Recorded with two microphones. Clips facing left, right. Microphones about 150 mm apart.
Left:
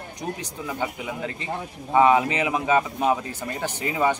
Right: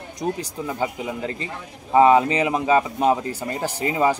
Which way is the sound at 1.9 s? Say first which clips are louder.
Right 3 dB; 30° right (ahead or behind).